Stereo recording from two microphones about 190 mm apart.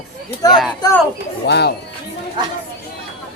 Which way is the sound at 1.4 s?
60° left (ahead or behind).